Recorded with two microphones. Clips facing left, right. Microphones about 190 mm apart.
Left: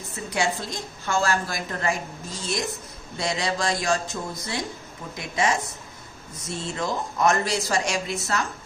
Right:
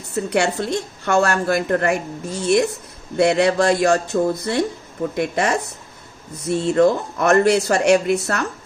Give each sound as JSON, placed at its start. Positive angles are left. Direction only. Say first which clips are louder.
{"t": 0.2, "sound": "a woman's voice", "louder": "right 7 dB", "side_deg": -70}